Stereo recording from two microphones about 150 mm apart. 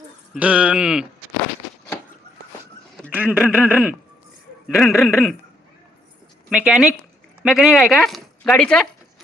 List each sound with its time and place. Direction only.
0.3 s speech: 10° right (ahead or behind)
3.1 s speech: 10° right (ahead or behind)
6.5 s speech: 5° right (ahead or behind)